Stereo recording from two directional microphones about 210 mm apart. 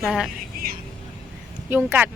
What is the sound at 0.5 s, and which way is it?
Vehicle, 45° right (ahead or behind).